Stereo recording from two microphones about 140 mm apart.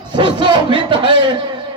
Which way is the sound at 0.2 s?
35° right (ahead or behind).